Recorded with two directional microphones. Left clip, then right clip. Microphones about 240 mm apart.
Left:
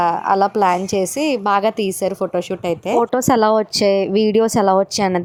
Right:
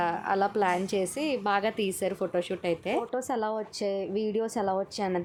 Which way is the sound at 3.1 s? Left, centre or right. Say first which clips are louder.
Left 15 dB; left.